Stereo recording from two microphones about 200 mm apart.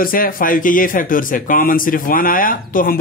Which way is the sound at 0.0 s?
45° left (ahead or behind).